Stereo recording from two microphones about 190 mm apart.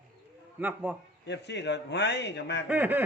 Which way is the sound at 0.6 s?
10° right (ahead or behind).